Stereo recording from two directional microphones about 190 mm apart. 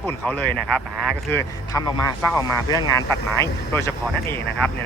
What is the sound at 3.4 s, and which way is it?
Speech, 15° left (ahead or behind).